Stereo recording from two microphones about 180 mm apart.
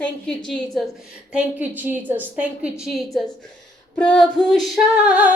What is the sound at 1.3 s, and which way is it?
A woman's voice, 10° right (ahead or behind).